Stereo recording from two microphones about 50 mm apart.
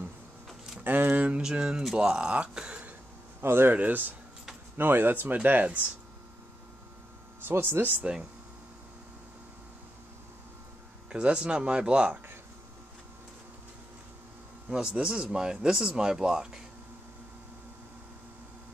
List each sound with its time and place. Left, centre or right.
0.8 s speech: right
1.4 s speech: centre
3.3 s speech: right
3.7 s speech: right
7.4 s speech: right
8.0 s speech: right
11.1 s speech: centre
14.7 s speech: centre